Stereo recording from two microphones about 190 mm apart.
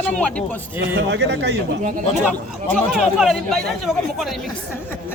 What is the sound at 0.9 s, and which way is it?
Speech, 65° right (ahead or behind).